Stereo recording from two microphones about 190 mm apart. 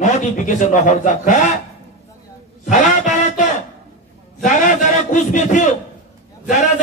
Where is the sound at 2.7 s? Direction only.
40° left (ahead or behind).